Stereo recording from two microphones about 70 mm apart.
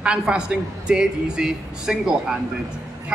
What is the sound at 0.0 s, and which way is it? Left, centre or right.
A man's voice, centre.